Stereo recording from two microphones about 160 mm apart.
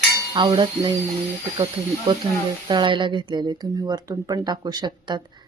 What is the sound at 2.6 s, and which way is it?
Speech, 30° right (ahead or behind).